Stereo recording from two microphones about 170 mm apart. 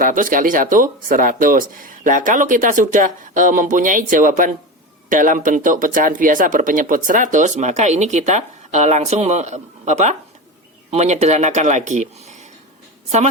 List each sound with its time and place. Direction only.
0.0 s a woman's voice: 50° right (ahead or behind)